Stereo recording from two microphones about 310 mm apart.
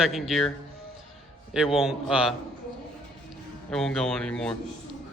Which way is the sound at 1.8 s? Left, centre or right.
Centre.